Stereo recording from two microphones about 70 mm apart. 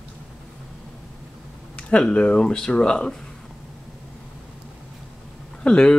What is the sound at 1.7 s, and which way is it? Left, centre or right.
Speech, centre.